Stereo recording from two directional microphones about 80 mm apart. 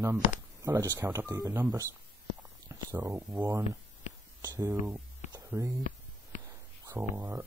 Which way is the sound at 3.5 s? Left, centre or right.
Right.